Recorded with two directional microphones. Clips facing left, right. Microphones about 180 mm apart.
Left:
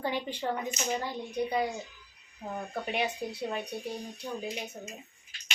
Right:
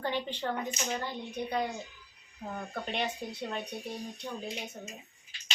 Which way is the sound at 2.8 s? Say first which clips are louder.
Left 3 dB; 10° left (ahead or behind).